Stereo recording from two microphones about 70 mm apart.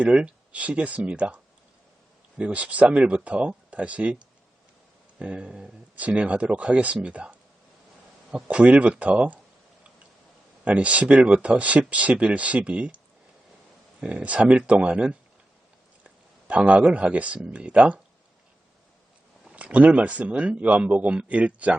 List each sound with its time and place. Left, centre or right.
0.0 s speech: centre
2.4 s speech: centre
5.2 s speech: centre
8.4 s speech: centre
10.6 s speech: centre
14.0 s speech: centre
19.5 s speech: centre